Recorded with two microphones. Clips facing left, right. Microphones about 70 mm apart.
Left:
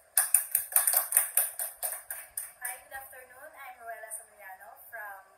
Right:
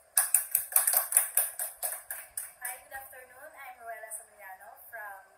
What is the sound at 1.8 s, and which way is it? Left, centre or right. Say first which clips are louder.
Music: even; left.